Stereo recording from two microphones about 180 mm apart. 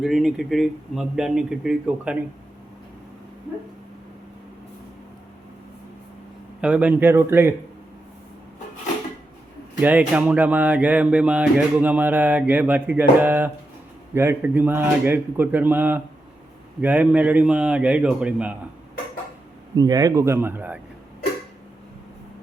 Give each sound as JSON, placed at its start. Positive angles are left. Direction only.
{"t": 0.0, "sound": "speech", "side_deg": 0}
{"t": 6.6, "sound": "speech", "side_deg": -5}
{"t": 9.8, "sound": "speech", "side_deg": -5}
{"t": 19.7, "sound": "speech", "side_deg": -20}